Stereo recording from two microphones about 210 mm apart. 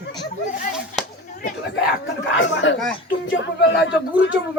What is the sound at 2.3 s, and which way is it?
Speech, 65° left (ahead or behind).